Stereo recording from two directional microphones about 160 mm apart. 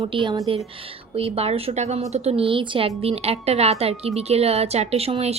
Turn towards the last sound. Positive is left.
turn(degrees=-40)  # may be behind; listen again after turning